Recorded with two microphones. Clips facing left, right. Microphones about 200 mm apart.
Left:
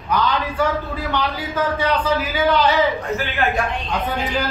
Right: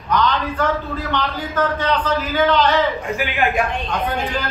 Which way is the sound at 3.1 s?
15° right (ahead or behind).